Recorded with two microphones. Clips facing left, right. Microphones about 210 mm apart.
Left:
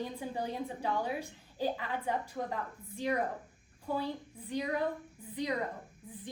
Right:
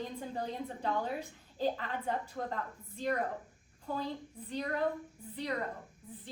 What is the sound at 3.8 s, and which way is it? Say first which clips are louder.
Speech: left 2 dB; 10° left (ahead or behind).